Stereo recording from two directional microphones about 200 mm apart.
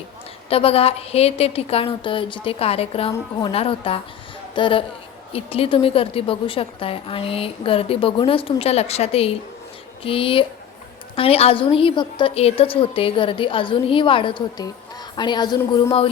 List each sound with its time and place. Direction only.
0.5 s a woman's voice: 30° left (ahead or behind)